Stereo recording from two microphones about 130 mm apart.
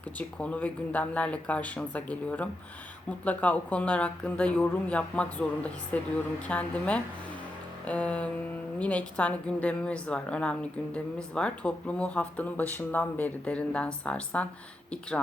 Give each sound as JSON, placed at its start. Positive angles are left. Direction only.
{"t": 0.2, "sound": "a woman's voice", "side_deg": 10}